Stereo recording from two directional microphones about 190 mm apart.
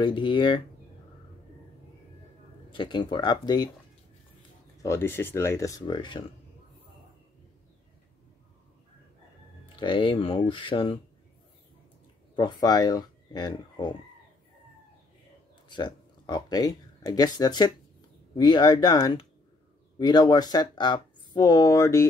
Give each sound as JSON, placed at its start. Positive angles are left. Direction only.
{"t": 0.0, "sound": "speech", "side_deg": 25}
{"t": 2.7, "sound": "speech", "side_deg": 25}
{"t": 4.8, "sound": "speech", "side_deg": 15}
{"t": 9.8, "sound": "speech", "side_deg": 25}
{"t": 12.4, "sound": "speech", "side_deg": 25}
{"t": 15.7, "sound": "speech", "side_deg": 25}